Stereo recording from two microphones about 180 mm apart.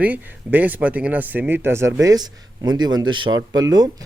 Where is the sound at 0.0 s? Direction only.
10° right (ahead or behind).